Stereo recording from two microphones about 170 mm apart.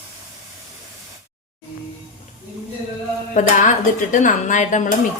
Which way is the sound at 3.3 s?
50° left (ahead or behind).